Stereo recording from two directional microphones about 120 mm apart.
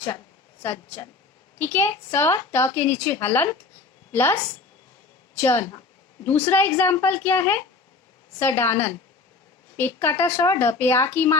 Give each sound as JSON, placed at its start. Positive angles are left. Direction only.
{"t": 0.6, "sound": "a woman's voice", "side_deg": 20}
{"t": 5.4, "sound": "a woman's voice", "side_deg": 20}